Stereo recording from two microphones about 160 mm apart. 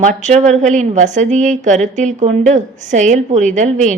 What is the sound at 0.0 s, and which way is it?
A woman's voice, 50° right (ahead or behind).